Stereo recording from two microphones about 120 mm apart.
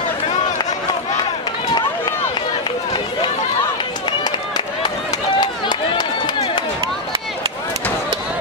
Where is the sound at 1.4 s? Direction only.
40° left (ahead or behind).